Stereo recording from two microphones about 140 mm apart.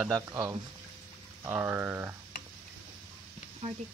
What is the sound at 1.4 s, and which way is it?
Speech, 10° right (ahead or behind).